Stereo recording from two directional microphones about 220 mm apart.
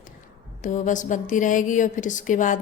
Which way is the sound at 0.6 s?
35° left (ahead or behind).